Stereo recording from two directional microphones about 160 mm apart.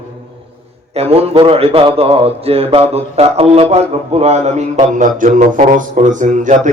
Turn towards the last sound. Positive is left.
turn(degrees=-50)  # may be behind; listen again after turning